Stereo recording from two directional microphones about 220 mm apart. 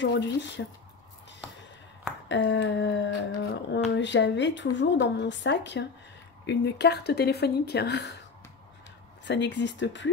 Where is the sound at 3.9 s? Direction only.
55° left (ahead or behind).